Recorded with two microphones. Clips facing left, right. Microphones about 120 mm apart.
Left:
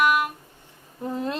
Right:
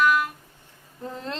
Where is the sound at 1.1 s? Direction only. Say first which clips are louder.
Left 6 dB; 15° left (ahead or behind).